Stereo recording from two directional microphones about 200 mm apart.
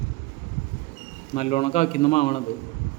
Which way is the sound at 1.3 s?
35° left (ahead or behind).